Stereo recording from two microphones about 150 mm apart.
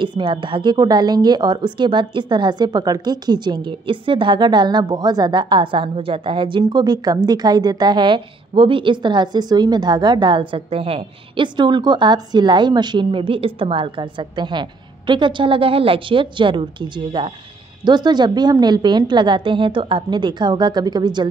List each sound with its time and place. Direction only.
0.0 s a woman's voice: 35° right (ahead or behind)